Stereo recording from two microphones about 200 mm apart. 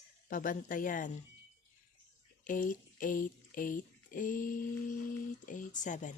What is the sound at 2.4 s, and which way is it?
Speech, 40° left (ahead or behind).